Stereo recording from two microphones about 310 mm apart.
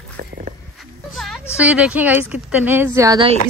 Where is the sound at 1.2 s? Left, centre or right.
Centre.